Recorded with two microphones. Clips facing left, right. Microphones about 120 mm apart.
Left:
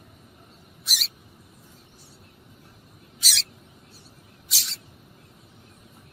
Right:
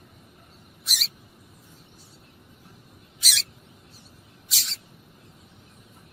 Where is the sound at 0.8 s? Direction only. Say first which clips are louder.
Even; centre (ahead or behind).